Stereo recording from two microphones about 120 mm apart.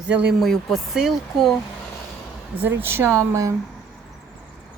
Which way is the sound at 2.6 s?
20° right (ahead or behind).